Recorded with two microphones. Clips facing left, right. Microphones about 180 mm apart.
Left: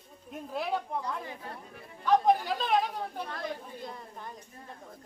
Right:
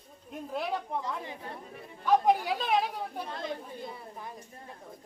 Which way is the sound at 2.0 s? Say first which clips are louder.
Even; 10° right (ahead or behind).